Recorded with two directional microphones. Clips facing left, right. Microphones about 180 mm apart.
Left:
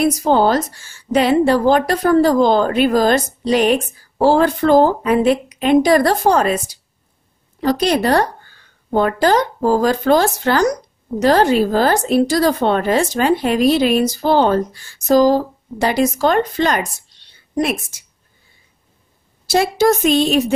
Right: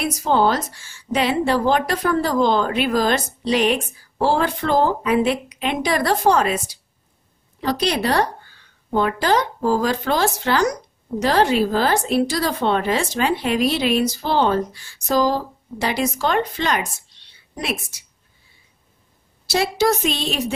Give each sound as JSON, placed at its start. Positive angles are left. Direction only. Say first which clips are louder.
{"t": 0.0, "sound": "a woman's voice", "louder": "left 4 dB", "side_deg": 40}
{"t": 19.4, "sound": "a woman's voice", "louder": "left 5 dB", "side_deg": 50}